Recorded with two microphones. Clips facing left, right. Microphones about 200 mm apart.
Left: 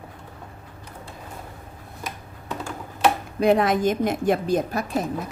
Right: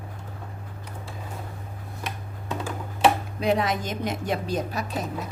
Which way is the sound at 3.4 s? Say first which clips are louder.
Left 6 dB; 50° left (ahead or behind).